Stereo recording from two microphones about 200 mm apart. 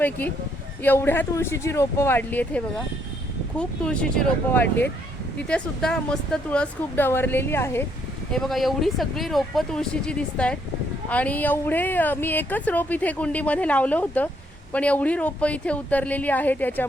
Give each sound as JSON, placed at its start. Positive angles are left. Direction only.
{"t": 0.0, "sound": "speech", "side_deg": 10}
{"t": 8.3, "sound": "speech", "side_deg": 0}